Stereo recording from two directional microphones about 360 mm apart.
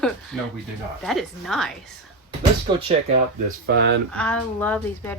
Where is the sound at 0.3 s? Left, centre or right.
Centre.